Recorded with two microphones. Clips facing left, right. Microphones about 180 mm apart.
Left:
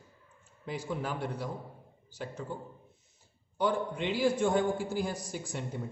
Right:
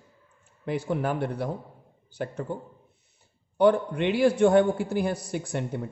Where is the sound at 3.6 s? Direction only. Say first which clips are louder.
Right 9 dB; 65° right (ahead or behind).